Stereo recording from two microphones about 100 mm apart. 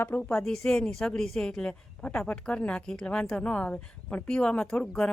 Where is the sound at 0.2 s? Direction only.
5° left (ahead or behind).